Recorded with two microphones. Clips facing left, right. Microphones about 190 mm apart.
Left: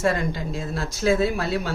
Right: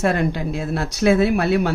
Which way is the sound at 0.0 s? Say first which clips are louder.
Right 3 dB; 65° right (ahead or behind).